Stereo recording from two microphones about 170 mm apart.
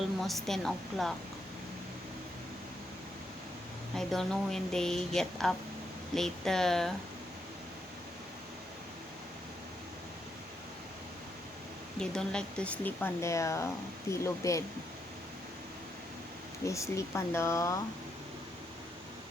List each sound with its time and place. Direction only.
0.2 s a woman's voice: centre (ahead or behind)
3.9 s a woman's voice: 5° left (ahead or behind)
11.9 s speech: 5° left (ahead or behind)
16.6 s speech: 15° left (ahead or behind)